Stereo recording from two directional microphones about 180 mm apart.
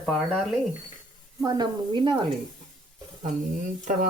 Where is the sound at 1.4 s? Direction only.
20° right (ahead or behind).